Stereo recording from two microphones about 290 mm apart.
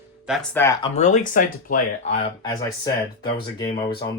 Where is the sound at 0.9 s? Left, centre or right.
Left.